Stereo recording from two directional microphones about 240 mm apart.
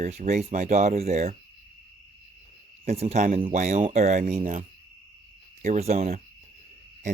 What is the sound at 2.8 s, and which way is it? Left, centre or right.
Speech, right.